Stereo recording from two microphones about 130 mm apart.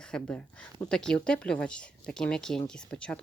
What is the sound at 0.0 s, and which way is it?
Speech, 10° left (ahead or behind).